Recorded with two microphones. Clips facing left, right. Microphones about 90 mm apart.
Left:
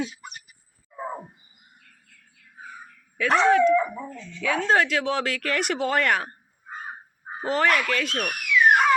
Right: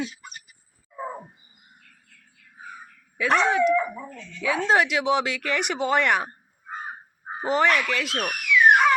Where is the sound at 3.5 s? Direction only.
15° right (ahead or behind).